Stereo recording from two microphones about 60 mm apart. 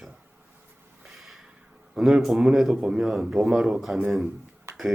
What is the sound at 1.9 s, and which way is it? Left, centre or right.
Speech, centre.